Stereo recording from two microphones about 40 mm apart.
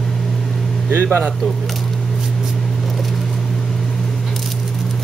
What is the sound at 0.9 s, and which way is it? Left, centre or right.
Speech, right.